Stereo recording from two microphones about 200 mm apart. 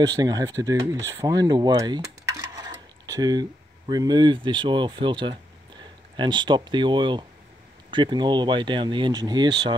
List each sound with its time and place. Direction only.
0.0 s speech: 20° right (ahead or behind)